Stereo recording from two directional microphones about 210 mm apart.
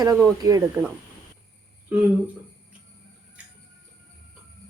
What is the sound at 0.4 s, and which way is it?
Speech, 15° right (ahead or behind).